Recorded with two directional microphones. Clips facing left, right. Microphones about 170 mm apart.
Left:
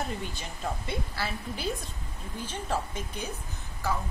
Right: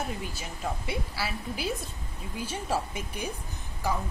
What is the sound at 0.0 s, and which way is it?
A woman's voice, 5° right (ahead or behind).